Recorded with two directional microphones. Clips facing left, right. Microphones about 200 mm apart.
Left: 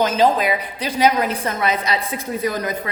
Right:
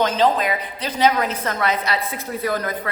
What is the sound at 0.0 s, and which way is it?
A woman's voice, 10° left (ahead or behind).